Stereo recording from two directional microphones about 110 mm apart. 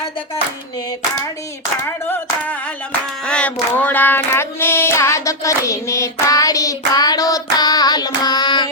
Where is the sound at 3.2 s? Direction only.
10° left (ahead or behind); by 8.6 s 40° left (ahead or behind).